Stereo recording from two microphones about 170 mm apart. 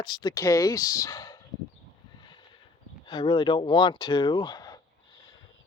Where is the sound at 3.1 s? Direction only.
30° left (ahead or behind).